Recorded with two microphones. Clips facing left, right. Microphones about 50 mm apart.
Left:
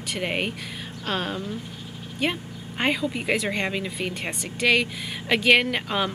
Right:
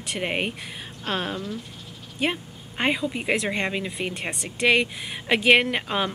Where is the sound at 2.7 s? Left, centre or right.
Centre.